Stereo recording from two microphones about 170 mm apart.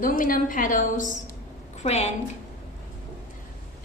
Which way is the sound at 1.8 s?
40° left (ahead or behind).